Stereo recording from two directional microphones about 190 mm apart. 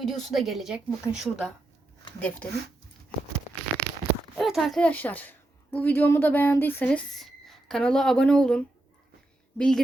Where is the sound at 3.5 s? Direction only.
40° left (ahead or behind).